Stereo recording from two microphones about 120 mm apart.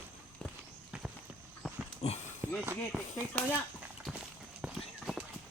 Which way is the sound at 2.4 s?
15° right (ahead or behind).